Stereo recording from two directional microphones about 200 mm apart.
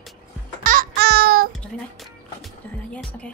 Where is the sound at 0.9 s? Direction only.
55° right (ahead or behind).